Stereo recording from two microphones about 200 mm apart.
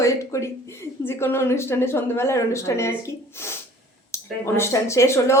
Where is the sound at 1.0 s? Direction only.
10° left (ahead or behind).